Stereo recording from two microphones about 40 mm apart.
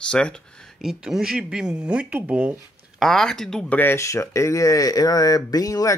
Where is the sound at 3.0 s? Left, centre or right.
Centre.